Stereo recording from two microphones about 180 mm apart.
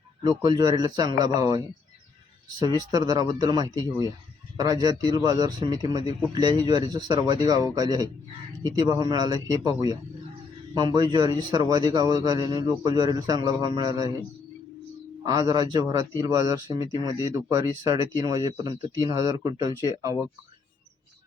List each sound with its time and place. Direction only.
0.3 s speech: 20° right (ahead or behind)
15.2 s speech: 20° right (ahead or behind)